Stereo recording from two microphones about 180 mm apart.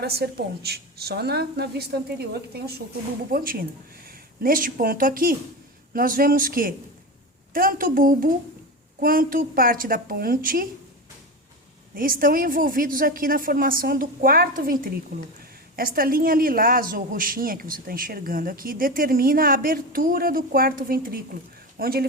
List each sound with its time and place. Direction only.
0.0 s a woman's voice: 60° right (ahead or behind)
11.9 s a man's voice: 50° right (ahead or behind)